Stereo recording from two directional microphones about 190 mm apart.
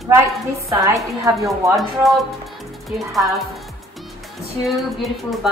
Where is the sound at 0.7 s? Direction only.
15° right (ahead or behind).